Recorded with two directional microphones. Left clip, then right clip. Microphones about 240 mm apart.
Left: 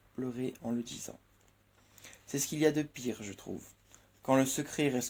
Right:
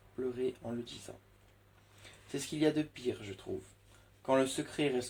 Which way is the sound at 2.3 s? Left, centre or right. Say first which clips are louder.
Left 3 dB; left.